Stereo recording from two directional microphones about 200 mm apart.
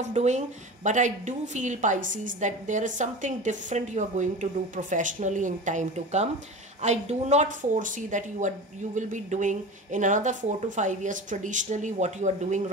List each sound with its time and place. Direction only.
0.0 s a woman's voice: 35° right (ahead or behind)